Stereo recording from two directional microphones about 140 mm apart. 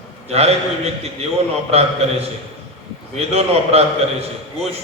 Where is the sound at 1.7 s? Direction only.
45° right (ahead or behind).